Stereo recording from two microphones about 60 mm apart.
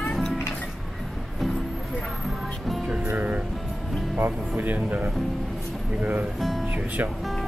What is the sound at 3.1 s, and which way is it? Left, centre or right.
Music, right.